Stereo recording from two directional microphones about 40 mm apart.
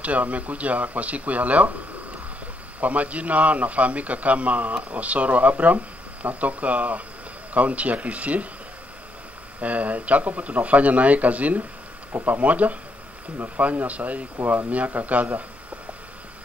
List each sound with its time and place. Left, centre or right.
0.0 s speech: right
2.8 s speech: right
9.6 s speech: right